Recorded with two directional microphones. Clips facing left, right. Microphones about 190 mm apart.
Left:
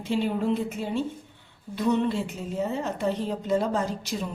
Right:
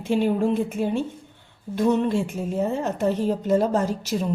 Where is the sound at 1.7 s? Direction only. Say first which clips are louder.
Right 4 dB; 50° right (ahead or behind).